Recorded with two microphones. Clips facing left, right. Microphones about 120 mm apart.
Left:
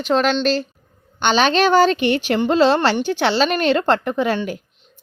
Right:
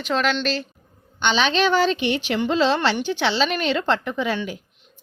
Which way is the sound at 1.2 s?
50° left (ahead or behind).